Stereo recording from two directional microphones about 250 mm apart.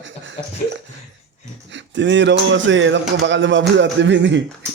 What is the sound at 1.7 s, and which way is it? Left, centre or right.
Speech, right.